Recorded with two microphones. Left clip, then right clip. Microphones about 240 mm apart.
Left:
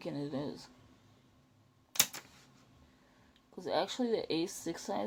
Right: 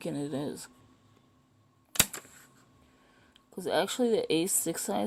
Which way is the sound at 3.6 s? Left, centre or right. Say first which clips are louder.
Right 5 dB; right.